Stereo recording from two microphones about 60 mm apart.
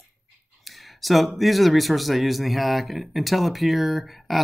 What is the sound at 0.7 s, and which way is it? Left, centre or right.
Speech, centre.